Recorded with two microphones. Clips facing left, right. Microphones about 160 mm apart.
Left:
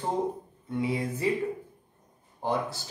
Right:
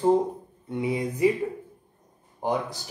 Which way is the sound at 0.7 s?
20° right (ahead or behind).